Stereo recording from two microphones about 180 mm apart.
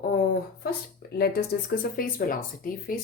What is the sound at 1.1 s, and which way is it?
A woman's voice, 60° left (ahead or behind).